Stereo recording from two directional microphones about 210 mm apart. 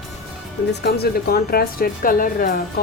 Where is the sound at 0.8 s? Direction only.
45° left (ahead or behind).